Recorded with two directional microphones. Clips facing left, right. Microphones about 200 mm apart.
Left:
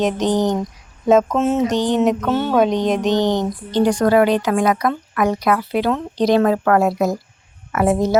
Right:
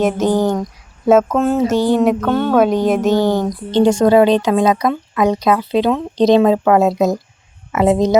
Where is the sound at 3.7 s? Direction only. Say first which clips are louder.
Right 4 dB; 25° right (ahead or behind).